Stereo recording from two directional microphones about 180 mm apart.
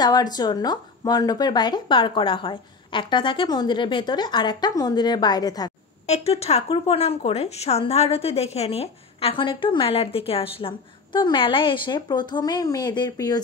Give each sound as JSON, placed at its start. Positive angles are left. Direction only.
{"t": 0.0, "sound": "speech", "side_deg": 20}
{"t": 6.0, "sound": "speech", "side_deg": 35}